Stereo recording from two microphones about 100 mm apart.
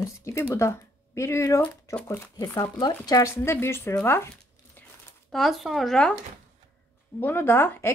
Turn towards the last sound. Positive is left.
turn(degrees=20)  # may be behind; listen again after turning